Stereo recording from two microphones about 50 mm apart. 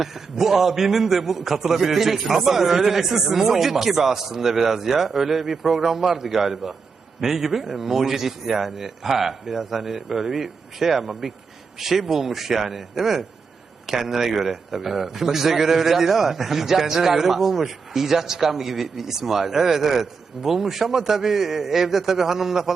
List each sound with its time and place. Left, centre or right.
0.0 s a man's voice: centre